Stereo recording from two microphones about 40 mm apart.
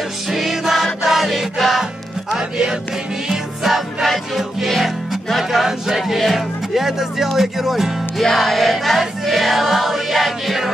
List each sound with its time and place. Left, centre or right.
0.3 s music: centre
2.3 s music: centre
3.3 s music: centre
4.7 s speech: centre
8.2 s music: centre